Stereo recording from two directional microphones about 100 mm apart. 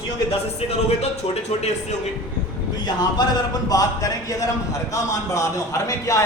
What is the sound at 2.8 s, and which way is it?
Speech, 45° left (ahead or behind).